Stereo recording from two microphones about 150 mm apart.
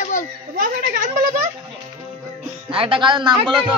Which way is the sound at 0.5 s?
70° right (ahead or behind).